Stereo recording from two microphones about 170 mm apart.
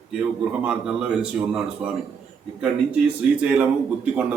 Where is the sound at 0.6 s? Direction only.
5° right (ahead or behind).